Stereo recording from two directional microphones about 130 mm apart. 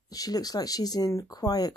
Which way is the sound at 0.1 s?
30° left (ahead or behind).